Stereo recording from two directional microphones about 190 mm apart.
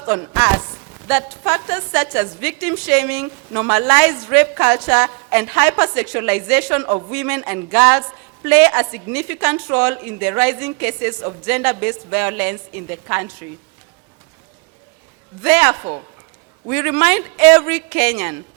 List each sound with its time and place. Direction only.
0.0 s chopping: 20° right (ahead or behind)
0.3 s a woman's voice: 5° right (ahead or behind)
0.6 s chopping: 15° right (ahead or behind)
1.1 s a woman's voice: 10° right (ahead or behind)
15.4 s a woman's voice: 5° right (ahead or behind)